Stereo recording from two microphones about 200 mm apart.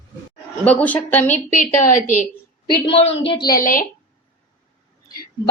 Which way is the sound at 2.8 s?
30° left (ahead or behind).